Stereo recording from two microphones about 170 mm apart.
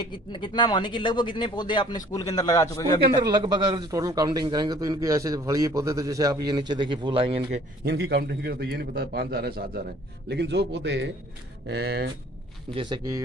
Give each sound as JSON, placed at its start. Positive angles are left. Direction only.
{"t": 0.0, "sound": "speech", "side_deg": 30}
{"t": 3.2, "sound": "a man's voice", "side_deg": -25}
{"t": 7.8, "sound": "a man's voice", "side_deg": -70}
{"t": 11.6, "sound": "a man's voice", "side_deg": -75}
{"t": 12.7, "sound": "a man's voice", "side_deg": -25}